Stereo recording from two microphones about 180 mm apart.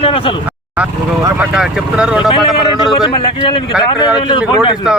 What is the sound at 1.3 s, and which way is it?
Speech, 5° right (ahead or behind).